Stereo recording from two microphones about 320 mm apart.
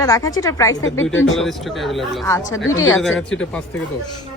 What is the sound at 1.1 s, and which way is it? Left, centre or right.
Speech, left.